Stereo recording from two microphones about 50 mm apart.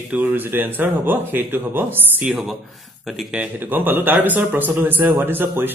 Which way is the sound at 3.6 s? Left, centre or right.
Right.